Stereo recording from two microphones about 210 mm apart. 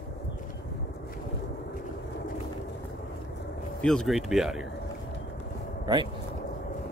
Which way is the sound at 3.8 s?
5° left (ahead or behind).